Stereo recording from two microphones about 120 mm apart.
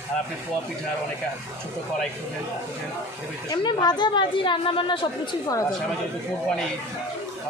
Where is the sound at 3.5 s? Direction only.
35° left (ahead or behind).